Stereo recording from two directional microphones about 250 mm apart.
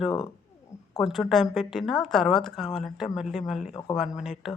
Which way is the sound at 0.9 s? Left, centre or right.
Centre.